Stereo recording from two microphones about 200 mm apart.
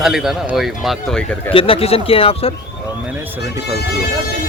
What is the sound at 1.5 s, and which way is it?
Speech, 30° left (ahead or behind).